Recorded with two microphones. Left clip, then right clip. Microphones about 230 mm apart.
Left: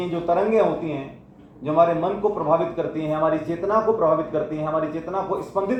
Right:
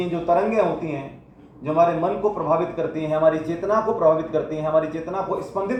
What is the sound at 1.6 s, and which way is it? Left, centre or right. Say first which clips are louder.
A man's voice: even; right.